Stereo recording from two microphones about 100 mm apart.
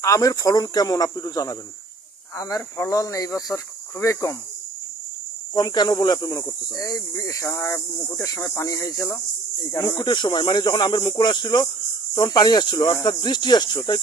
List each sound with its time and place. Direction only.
0.0 s speech: 35° left (ahead or behind)
5.5 s speech: 45° left (ahead or behind); by 7.8 s 25° left (ahead or behind)
7.9 s speech: 35° left (ahead or behind)
9.0 s speech: 20° left (ahead or behind)
9.7 s speech: 35° left (ahead or behind)